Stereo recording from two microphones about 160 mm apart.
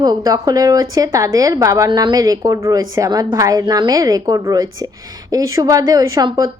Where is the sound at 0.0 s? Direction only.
25° right (ahead or behind).